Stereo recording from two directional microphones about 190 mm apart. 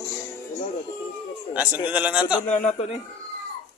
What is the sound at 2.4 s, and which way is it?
Speech, 40° left (ahead or behind).